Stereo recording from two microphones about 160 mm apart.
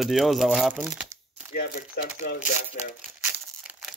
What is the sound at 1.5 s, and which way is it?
Speech, 75° left (ahead or behind).